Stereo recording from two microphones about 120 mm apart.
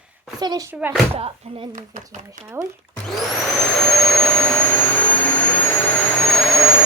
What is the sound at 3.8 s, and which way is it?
Vacuum cleaner, 5° left (ahead or behind).